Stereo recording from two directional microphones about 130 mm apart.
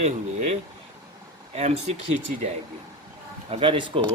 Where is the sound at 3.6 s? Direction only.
40° right (ahead or behind).